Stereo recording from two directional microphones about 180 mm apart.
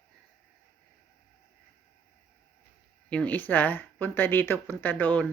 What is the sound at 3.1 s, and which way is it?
Speech, 10° left (ahead or behind).